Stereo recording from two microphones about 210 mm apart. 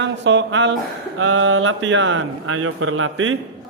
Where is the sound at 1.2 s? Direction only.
70° right (ahead or behind).